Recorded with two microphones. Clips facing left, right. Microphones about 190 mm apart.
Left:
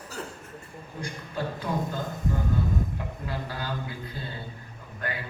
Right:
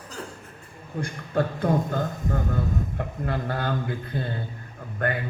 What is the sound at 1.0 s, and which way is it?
Speech, 55° right (ahead or behind).